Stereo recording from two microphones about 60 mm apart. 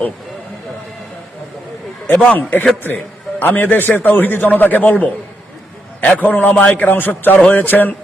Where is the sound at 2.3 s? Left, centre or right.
Left.